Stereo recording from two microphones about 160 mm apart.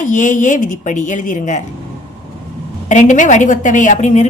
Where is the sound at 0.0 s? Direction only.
50° left (ahead or behind).